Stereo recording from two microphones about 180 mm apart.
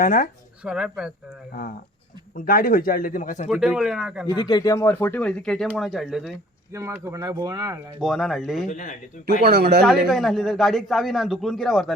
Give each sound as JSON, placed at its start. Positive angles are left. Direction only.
{"t": 0.0, "sound": "speech", "side_deg": 50}
{"t": 0.6, "sound": "a man's voice", "side_deg": -5}
{"t": 2.3, "sound": "speech", "side_deg": 50}
{"t": 3.5, "sound": "a man's voice", "side_deg": -5}
{"t": 4.3, "sound": "a man's voice", "side_deg": 25}
{"t": 6.7, "sound": "speech", "side_deg": -15}
{"t": 8.0, "sound": "a man's voice", "side_deg": 0}
{"t": 8.6, "sound": "speech", "side_deg": 45}
{"t": 9.4, "sound": "speech", "side_deg": -60}
{"t": 10.1, "sound": "a man's voice", "side_deg": 0}